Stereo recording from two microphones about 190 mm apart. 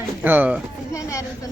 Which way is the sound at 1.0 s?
15° left (ahead or behind).